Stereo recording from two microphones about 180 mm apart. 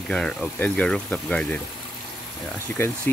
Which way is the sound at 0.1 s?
5° left (ahead or behind).